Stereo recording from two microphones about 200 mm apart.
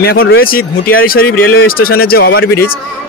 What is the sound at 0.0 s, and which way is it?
Speech, 50° left (ahead or behind).